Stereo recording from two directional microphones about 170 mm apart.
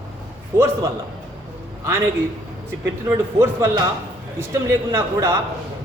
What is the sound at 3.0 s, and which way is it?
A man's voice, 15° right (ahead or behind).